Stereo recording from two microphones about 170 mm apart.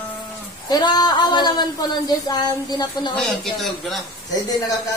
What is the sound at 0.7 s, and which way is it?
A woman's voice, 25° left (ahead or behind).